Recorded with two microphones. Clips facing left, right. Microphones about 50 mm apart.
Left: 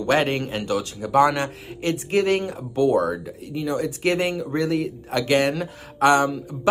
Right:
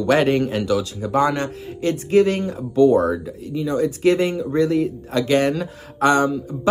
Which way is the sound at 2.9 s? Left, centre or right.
Right.